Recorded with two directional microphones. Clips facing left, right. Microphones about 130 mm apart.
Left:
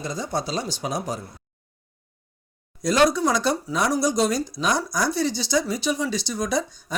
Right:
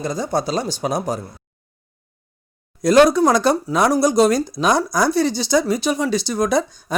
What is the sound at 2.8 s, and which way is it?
Speech, 55° right (ahead or behind).